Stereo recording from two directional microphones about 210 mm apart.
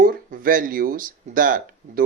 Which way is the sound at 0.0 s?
40° right (ahead or behind).